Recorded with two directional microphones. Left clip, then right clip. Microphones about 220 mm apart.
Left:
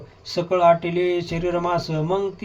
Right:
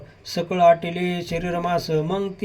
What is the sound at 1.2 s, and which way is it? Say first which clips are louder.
Speech: left 2 dB; 20° right (ahead or behind).